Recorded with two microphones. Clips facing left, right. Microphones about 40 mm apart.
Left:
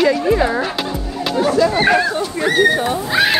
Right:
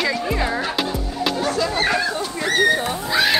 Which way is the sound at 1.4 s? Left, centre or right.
Centre.